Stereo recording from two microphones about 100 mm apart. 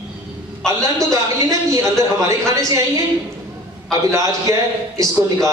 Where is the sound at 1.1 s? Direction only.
35° right (ahead or behind).